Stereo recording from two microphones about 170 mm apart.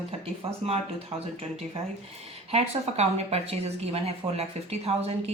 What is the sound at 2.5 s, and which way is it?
Speech, 35° right (ahead or behind).